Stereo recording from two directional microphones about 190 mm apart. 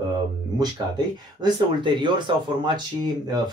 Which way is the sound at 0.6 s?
20° right (ahead or behind).